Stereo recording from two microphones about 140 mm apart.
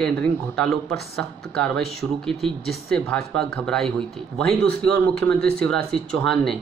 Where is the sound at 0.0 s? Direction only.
5° left (ahead or behind).